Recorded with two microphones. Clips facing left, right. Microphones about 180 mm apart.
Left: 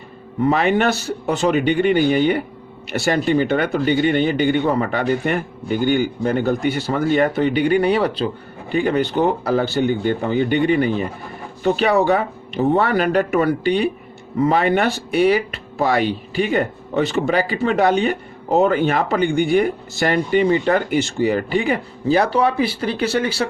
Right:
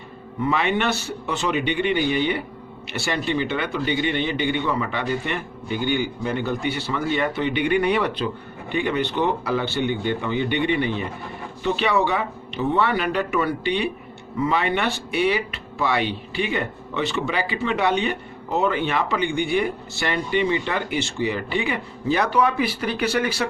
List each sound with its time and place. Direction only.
0.4 s a man's voice: 40° left (ahead or behind)